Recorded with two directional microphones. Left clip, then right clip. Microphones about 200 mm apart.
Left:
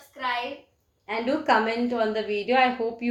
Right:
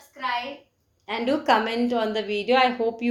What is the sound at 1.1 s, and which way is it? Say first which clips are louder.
A woman's voice: right 1 dB; 35° right (ahead or behind).